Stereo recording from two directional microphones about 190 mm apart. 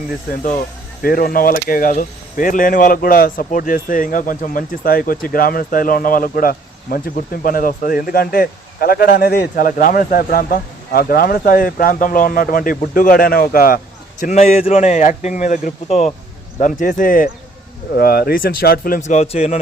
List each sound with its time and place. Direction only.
1.0 s speech: 50° left (ahead or behind)